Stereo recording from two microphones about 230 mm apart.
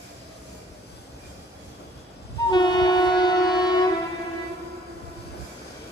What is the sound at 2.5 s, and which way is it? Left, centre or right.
Train, centre.